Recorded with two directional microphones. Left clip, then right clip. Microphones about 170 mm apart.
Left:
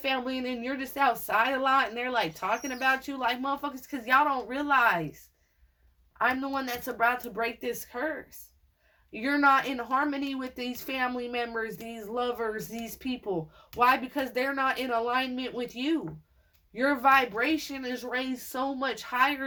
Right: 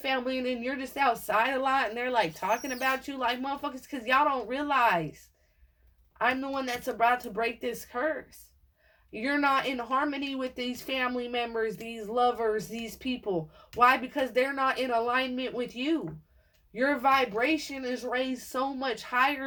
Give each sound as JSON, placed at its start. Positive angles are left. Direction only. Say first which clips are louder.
{"t": 0.0, "sound": "speech", "louder": "right 1 dB", "side_deg": 35}
{"t": 6.1, "sound": "speech", "louder": "left 1 dB", "side_deg": 30}
{"t": 9.1, "sound": "speech", "louder": "left 3 dB", "side_deg": 35}